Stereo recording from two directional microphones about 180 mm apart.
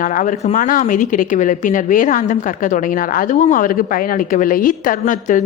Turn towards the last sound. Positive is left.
turn(degrees=45)  # may be behind; listen again after turning